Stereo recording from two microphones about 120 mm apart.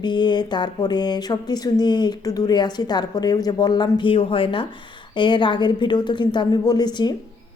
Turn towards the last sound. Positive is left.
turn(degrees=35)  # may be behind; listen again after turning